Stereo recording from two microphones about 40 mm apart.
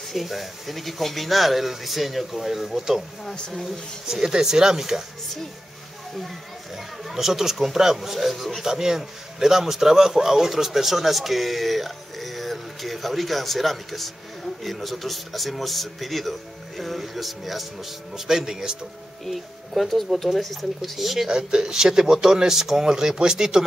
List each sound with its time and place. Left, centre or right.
0.1 s a man's voice: centre
4.1 s a man's voice: centre
7.1 s a man's voice: centre
8.6 s a man's voice: centre
19.2 s a man's voice: centre
21.3 s a man's voice: centre